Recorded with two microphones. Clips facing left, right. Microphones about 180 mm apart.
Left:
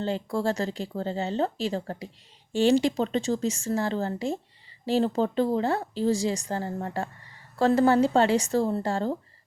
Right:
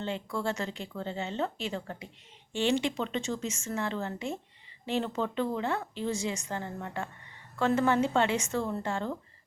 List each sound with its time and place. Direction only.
0.0 s a woman's voice: 35° left (ahead or behind)